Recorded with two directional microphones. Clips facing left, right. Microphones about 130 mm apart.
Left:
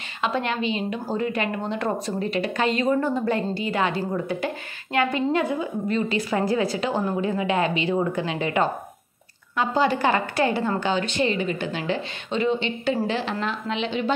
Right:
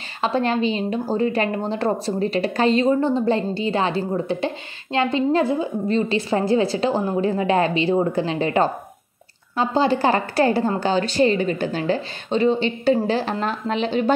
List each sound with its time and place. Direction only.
0.2 s a woman's voice: 35° right (ahead or behind)